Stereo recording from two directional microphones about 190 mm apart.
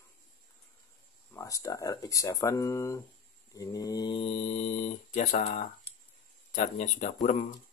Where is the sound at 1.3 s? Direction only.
15° left (ahead or behind).